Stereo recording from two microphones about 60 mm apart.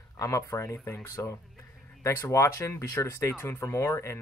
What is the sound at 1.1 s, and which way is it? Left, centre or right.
Speech, left.